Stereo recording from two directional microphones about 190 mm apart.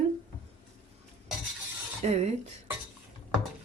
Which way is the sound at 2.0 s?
35° right (ahead or behind).